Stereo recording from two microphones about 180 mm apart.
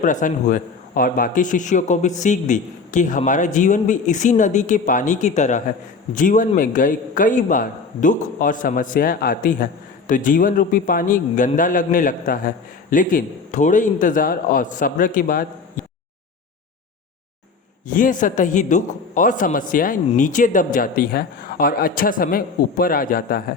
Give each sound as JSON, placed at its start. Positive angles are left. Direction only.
{"t": 0.0, "sound": "a man's voice", "side_deg": 45}
{"t": 17.8, "sound": "a man's voice", "side_deg": 50}